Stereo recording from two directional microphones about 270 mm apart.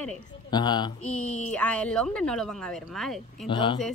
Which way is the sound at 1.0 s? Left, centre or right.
Centre.